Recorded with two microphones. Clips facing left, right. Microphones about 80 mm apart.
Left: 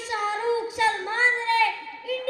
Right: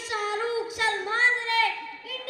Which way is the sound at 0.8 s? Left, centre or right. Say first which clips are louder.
Left 2 dB; left.